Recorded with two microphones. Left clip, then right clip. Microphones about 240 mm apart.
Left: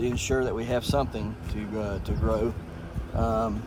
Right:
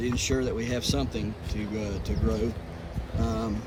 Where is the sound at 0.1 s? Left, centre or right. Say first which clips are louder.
Left 1 dB; centre.